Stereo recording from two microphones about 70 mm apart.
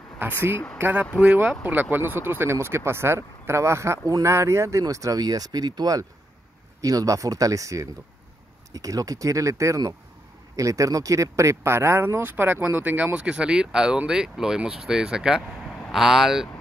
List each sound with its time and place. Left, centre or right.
0.7 s speech: right
6.8 s speech: right; by 16.4 s centre